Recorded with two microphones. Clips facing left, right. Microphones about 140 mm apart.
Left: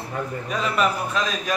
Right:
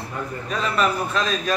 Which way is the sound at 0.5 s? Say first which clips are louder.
Right 1 dB; 10° left (ahead or behind).